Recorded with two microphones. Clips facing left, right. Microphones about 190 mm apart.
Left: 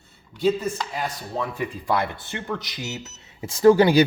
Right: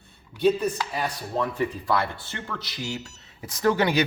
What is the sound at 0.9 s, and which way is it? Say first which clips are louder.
Speech: right 1 dB; 10° left (ahead or behind).